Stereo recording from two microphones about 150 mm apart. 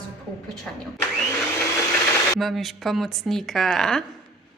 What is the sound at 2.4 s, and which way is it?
Speech, centre (ahead or behind).